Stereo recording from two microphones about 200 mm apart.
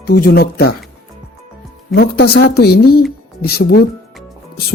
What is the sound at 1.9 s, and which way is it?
Speech, 55° left (ahead or behind).